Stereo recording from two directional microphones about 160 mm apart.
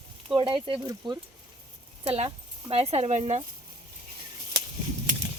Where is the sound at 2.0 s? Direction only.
40° right (ahead or behind).